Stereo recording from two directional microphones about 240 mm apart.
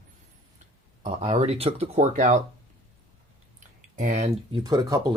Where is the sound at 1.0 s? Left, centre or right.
Right.